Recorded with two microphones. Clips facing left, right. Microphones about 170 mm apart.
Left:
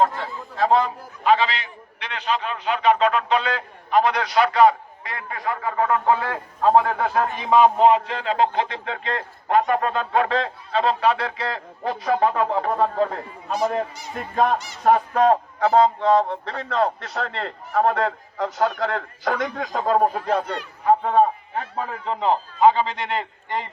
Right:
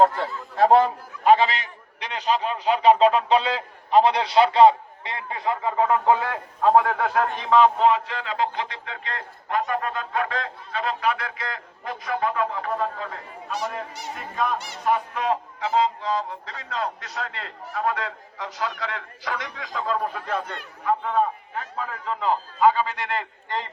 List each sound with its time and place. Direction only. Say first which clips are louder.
0.5 s a man's voice: right 3 dB; 55° right (ahead or behind); by 6.7 s 15° right (ahead or behind)
6.7 s a man's voice: left 1 dB; centre (ahead or behind); by 8.4 s 25° left (ahead or behind)
8.5 s a man's voice: left 6 dB; 50° left (ahead or behind)
9.0 s a man's voice: left 6 dB; 25° left (ahead or behind)
13.5 s speech: left 7 dB; 70° right (ahead or behind)
14.8 s a man's voice: left 7 dB; 50° left (ahead or behind); by 23.6 s 15° left (ahead or behind)